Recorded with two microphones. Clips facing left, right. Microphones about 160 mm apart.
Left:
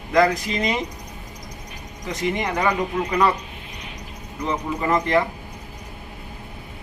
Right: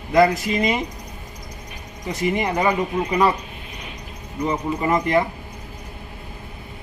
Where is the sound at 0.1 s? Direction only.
10° right (ahead or behind).